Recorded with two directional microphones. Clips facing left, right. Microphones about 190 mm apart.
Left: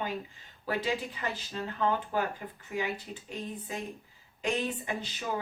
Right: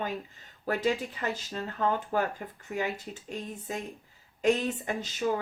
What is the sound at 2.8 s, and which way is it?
Speech, 45° right (ahead or behind).